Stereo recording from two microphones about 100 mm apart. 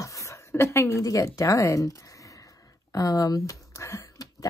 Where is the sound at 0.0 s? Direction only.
30° left (ahead or behind).